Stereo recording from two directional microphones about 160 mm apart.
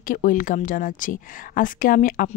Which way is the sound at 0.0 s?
55° left (ahead or behind).